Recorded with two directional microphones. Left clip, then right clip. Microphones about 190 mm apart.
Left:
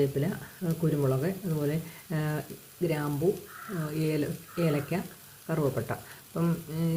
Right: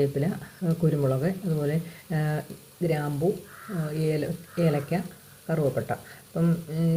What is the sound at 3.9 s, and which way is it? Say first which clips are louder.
Speech: right 3 dB; centre (ahead or behind).